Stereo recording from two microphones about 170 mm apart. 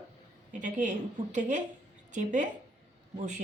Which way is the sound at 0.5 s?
45° right (ahead or behind).